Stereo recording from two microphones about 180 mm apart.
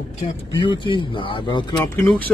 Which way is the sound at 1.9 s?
10° left (ahead or behind).